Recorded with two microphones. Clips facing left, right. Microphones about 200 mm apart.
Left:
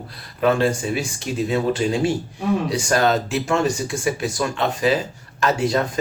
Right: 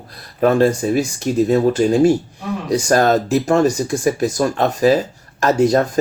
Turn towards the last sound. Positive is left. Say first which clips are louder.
# right 6 dB
turn(degrees=-45)  # may be behind; listen again after turning